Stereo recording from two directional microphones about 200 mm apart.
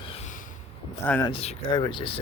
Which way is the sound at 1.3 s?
30° left (ahead or behind).